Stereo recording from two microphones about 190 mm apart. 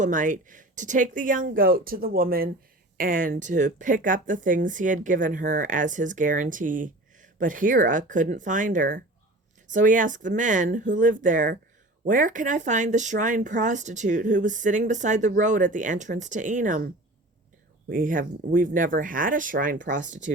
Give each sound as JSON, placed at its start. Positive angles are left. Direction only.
{"t": 0.0, "sound": "speech", "side_deg": -45}